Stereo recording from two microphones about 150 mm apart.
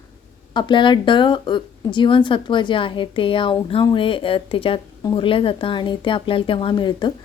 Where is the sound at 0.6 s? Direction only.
30° left (ahead or behind).